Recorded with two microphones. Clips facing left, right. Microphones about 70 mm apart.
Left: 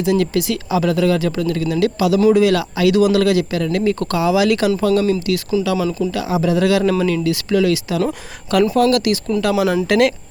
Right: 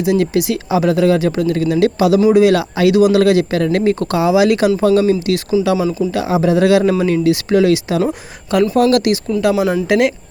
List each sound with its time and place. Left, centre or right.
0.0 s speech: centre
3.2 s speech: right
3.6 s speech: right
4.0 s speech: right; by 6.1 s centre
6.1 s speech: right
8.0 s speech: centre
8.8 s speech: right
9.3 s speech: centre
9.6 s speech: centre